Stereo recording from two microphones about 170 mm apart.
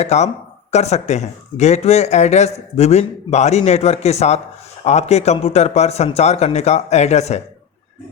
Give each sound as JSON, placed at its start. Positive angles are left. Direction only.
{"t": 0.0, "sound": "speech", "side_deg": 40}